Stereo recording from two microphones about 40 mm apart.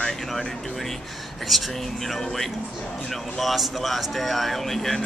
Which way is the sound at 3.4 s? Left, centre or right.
Centre.